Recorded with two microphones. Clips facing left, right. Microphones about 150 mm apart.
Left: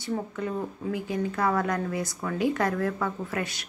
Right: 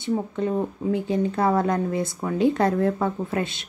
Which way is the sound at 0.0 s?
25° right (ahead or behind).